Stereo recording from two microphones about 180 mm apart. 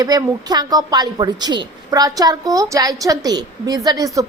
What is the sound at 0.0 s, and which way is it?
A woman's voice, 20° right (ahead or behind).